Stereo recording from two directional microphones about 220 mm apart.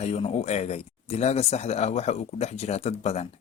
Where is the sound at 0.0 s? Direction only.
30° left (ahead or behind).